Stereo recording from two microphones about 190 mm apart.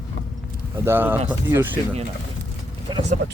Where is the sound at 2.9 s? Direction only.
25° right (ahead or behind).